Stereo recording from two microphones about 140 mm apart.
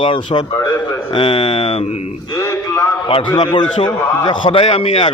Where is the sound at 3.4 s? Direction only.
35° left (ahead or behind).